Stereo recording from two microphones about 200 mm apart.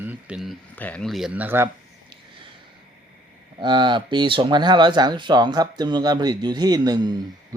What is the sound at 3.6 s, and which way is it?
Speech, 25° right (ahead or behind).